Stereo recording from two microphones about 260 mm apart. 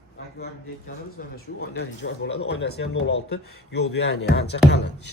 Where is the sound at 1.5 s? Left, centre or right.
Left.